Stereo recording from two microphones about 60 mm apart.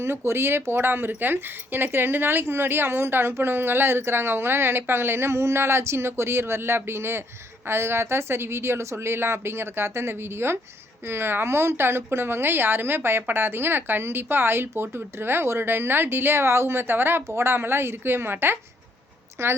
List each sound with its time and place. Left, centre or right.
0.0 s speech: right